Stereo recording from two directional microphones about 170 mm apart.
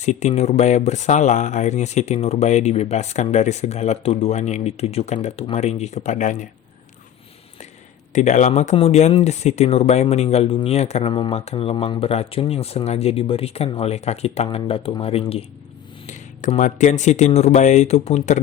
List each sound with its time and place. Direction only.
0.0 s speech: 45° left (ahead or behind)
8.1 s speech: 45° left (ahead or behind)
16.0 s speech: 45° left (ahead or behind)